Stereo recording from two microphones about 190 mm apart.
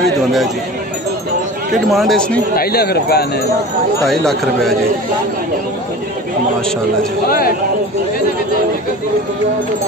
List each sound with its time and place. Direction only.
1.7 s speech: centre (ahead or behind)
2.5 s a man's voice: 55° left (ahead or behind)
4.1 s speech: centre (ahead or behind)
7.2 s speech: 50° left (ahead or behind)